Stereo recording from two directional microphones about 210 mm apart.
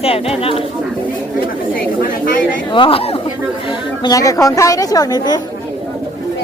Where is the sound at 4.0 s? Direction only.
15° left (ahead or behind).